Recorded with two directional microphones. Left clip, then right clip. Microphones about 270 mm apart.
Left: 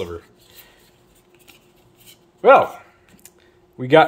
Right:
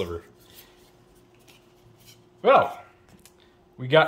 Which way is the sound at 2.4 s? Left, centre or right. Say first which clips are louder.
Left 6 dB; centre.